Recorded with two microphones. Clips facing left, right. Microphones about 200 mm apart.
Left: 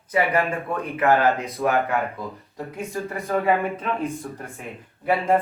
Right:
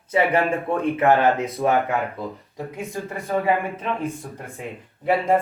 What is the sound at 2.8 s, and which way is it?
Speech, 15° right (ahead or behind).